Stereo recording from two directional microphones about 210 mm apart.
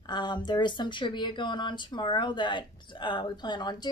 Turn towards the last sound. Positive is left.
turn(degrees=20)  # may be behind; listen again after turning